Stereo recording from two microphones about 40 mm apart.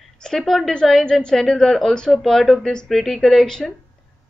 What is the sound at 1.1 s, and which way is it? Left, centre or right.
Speech, centre.